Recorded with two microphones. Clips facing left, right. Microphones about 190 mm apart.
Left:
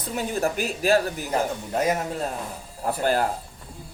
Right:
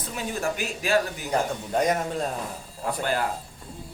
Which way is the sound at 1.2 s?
5° left (ahead or behind).